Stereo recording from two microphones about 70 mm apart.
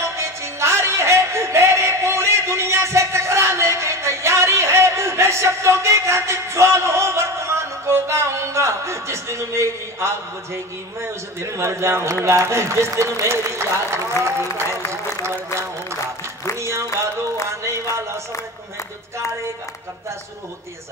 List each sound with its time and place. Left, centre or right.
0.0 s music: right
12.3 s a man's voice: right
16.5 s a sound: right
17.5 s music: right